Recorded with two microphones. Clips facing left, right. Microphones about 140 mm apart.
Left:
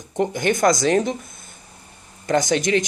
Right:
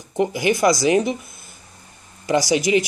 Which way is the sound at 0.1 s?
5° right (ahead or behind).